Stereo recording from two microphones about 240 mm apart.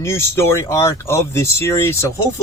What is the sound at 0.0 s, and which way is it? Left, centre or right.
Speech, centre.